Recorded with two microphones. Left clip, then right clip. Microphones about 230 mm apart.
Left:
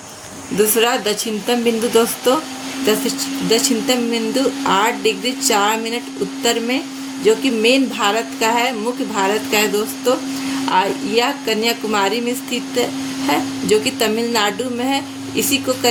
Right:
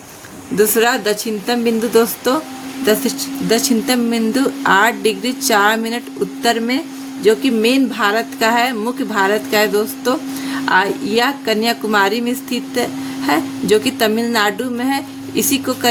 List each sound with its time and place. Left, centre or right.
0.8 s a woman's voice: centre
3.8 s a woman's voice: right